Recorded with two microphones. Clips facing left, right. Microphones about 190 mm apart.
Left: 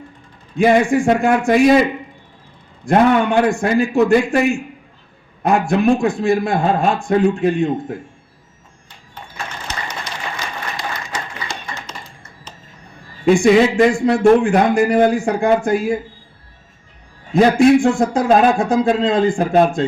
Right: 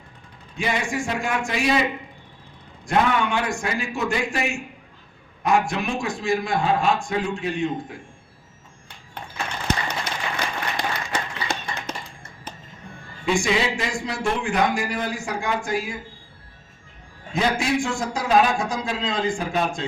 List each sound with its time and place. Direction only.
0.5 s a man's voice: 55° left (ahead or behind)
5.6 s a man's voice: 60° left (ahead or behind)
9.6 s applause: 55° right (ahead or behind)
13.2 s a man's voice: 55° left (ahead or behind)
17.3 s a man's voice: 55° left (ahead or behind)